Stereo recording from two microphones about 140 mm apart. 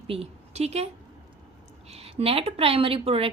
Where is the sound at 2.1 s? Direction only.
45° right (ahead or behind).